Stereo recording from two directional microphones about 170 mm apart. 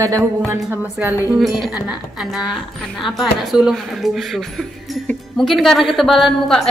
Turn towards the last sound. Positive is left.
turn(degrees=0)  # may be behind; listen again after turning